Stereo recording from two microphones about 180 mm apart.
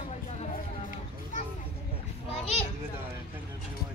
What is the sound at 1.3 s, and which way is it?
Children playing, 45° left (ahead or behind).